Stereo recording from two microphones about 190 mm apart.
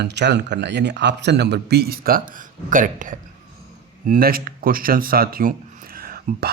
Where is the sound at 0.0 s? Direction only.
65° right (ahead or behind).